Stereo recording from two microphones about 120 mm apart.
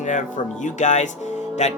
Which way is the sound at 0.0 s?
85° left.